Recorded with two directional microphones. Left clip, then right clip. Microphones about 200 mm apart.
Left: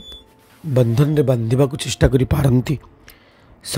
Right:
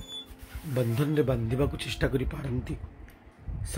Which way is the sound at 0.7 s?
50° left (ahead or behind).